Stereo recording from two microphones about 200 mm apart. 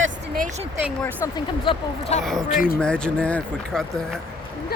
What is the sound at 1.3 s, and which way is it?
Speech, 25° left (ahead or behind).